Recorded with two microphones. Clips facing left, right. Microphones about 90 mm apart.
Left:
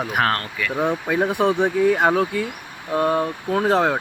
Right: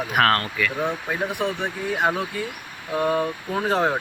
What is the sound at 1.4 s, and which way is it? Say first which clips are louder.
Speech: left 9 dB; 75° left (ahead or behind).